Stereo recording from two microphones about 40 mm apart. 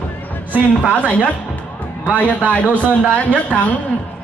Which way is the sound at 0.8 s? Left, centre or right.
Left.